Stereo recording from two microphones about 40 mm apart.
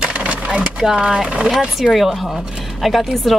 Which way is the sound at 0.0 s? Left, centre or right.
Right.